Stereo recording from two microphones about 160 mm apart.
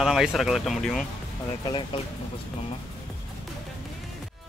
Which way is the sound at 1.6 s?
30° left (ahead or behind).